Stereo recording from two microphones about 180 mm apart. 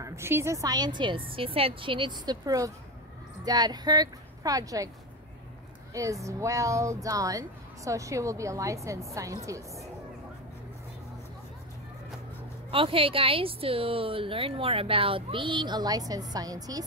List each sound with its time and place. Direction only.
0.0 s a woman's voice: 15° right (ahead or behind)
5.9 s speech: 20° right (ahead or behind)
12.7 s a woman's voice: 30° right (ahead or behind)